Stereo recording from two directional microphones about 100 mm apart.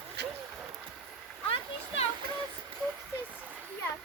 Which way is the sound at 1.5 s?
90° left.